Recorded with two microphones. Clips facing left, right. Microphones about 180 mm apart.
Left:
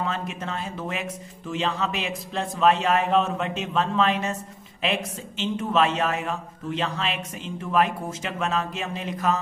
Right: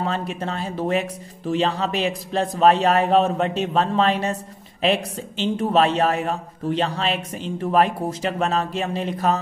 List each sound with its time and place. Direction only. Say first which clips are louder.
0.0 s speech: right 4 dB; 35° right (ahead or behind)